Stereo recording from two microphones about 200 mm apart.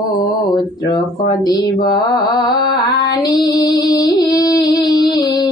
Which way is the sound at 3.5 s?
20° left (ahead or behind).